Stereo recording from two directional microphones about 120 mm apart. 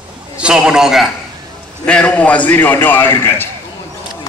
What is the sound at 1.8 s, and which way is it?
A man's voice, 10° left (ahead or behind).